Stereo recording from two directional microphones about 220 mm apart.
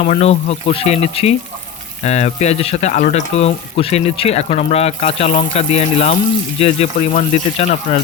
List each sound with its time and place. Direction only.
0.0 s speech: 30° left (ahead or behind)